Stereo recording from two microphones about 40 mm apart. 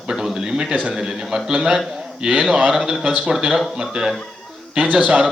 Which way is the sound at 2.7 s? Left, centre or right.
Centre.